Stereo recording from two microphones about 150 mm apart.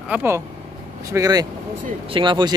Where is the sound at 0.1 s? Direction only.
15° right (ahead or behind).